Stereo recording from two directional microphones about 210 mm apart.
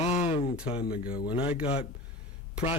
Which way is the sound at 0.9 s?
45° left (ahead or behind).